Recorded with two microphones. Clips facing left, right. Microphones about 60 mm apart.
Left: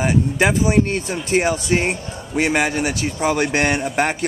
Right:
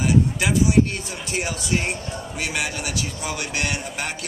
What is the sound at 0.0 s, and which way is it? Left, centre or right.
Speech, left.